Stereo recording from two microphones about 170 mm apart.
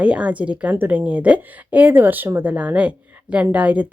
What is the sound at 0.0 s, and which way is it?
A woman's voice, 5° right (ahead or behind).